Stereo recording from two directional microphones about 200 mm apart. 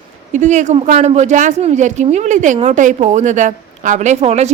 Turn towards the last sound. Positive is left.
turn(degrees=-35)  # may be behind; listen again after turning